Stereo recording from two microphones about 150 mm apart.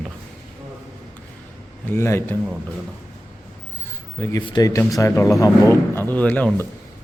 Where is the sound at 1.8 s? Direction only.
15° left (ahead or behind).